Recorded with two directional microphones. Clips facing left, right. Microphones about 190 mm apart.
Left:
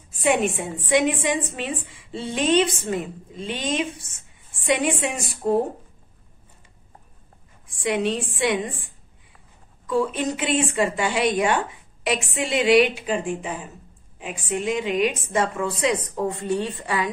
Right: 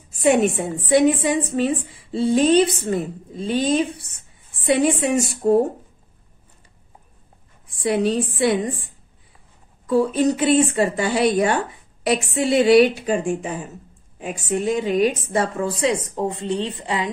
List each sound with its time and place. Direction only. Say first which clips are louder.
0.1 s a woman's voice: right 4 dB; 40° right (ahead or behind)
7.8 s a woman's voice: right 4 dB; 35° right (ahead or behind); by 17.1 s 20° right (ahead or behind)